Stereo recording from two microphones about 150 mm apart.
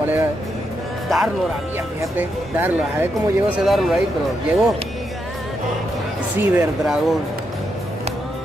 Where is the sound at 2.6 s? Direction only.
15° right (ahead or behind).